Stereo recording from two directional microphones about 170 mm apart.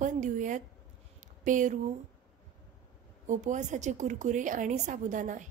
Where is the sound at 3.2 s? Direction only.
45° right (ahead or behind).